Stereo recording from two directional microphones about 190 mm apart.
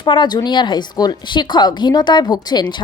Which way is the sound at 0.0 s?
25° left (ahead or behind).